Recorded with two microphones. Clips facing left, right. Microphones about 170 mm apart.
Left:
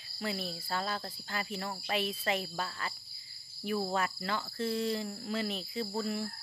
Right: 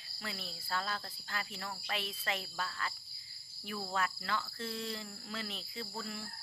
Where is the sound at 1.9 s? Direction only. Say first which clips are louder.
Left 7 dB; 15° left (ahead or behind).